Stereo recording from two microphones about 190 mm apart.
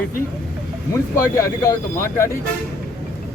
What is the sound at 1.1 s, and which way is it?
Speech, 15° left (ahead or behind).